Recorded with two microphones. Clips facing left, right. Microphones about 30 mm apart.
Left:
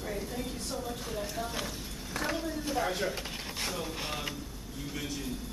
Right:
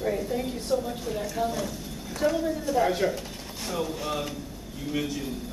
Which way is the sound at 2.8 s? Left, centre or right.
Centre.